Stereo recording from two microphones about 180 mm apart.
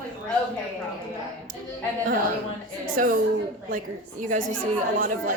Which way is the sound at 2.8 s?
50° right (ahead or behind).